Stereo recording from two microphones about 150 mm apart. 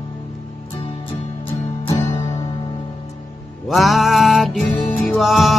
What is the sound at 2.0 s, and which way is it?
Music, 20° left (ahead or behind).